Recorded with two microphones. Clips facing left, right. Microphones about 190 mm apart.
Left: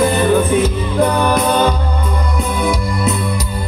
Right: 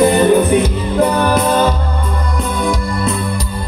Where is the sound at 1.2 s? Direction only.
5° right (ahead or behind).